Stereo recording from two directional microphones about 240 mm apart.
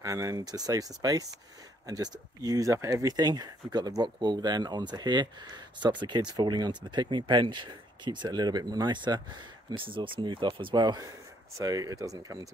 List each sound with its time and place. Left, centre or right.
0.0 s speech: centre